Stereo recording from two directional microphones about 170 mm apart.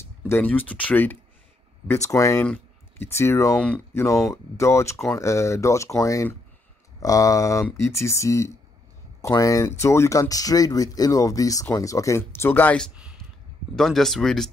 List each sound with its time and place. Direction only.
0.0 s speech: 10° left (ahead or behind)
12.9 s a sound: 5° right (ahead or behind)
13.7 s speech: centre (ahead or behind)